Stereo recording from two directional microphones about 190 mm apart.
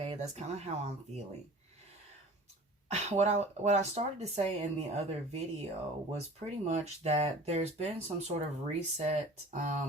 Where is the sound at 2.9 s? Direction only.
35° right (ahead or behind).